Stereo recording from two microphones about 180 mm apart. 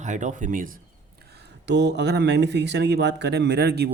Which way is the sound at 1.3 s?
70° right (ahead or behind).